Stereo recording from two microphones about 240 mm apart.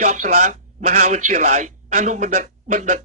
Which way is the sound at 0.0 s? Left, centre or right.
Right.